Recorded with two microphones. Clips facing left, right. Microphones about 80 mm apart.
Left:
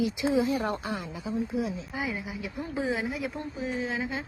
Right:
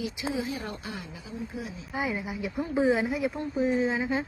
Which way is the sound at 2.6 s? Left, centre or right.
Right.